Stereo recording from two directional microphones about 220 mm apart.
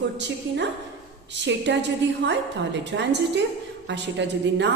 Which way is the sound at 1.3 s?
55° right (ahead or behind).